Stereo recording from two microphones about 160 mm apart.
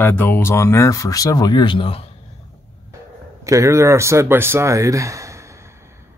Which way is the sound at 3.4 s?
20° right (ahead or behind).